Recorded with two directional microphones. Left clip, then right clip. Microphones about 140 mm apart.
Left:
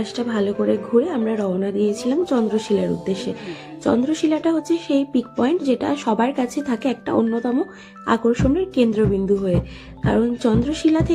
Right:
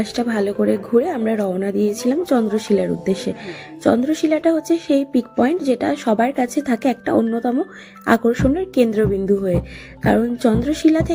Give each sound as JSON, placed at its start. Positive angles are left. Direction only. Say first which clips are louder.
{"t": 0.0, "sound": "a woman's voice", "louder": "right 2 dB", "side_deg": -25}